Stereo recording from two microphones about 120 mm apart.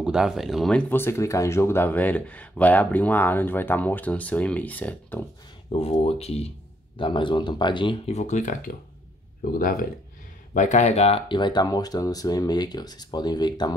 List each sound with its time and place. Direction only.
0.0 s speech: 5° right (ahead or behind); by 5.2 s 15° left (ahead or behind)
5.7 s speech: 50° left (ahead or behind)
7.0 s speech: 45° left (ahead or behind)
8.1 s speech: 75° left (ahead or behind)
10.5 s speech: 90° left; by 11.2 s 60° left (ahead or behind)
11.2 s speech: 40° left (ahead or behind)